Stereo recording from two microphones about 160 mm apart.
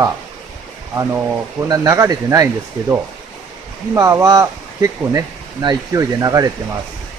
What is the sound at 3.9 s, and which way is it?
Speech, 20° right (ahead or behind).